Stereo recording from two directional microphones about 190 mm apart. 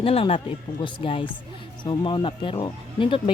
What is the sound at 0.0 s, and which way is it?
Speech, 30° left (ahead or behind).